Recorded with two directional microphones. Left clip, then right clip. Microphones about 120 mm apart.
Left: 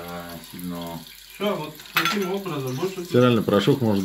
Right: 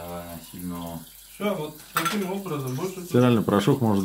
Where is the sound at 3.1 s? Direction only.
20° right (ahead or behind).